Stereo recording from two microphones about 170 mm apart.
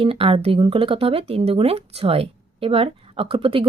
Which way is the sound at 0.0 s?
35° right (ahead or behind).